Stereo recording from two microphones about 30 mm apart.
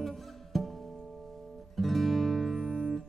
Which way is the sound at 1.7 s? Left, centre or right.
Centre.